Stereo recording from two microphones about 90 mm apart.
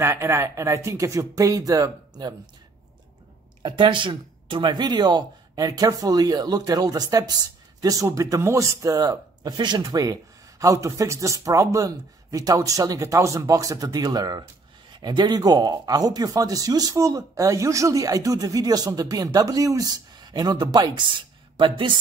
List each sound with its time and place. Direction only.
0.0 s speech: 30° right (ahead or behind)
3.6 s speech: 60° right (ahead or behind); by 14.4 s 45° right (ahead or behind)
14.9 s speech: 55° right (ahead or behind)